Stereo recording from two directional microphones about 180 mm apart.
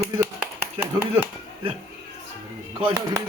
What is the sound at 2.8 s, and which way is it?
Speech, 25° right (ahead or behind).